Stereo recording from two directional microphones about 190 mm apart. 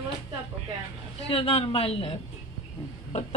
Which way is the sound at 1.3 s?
30° left (ahead or behind).